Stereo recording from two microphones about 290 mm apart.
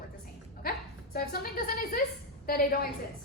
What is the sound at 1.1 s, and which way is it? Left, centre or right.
Speech, left.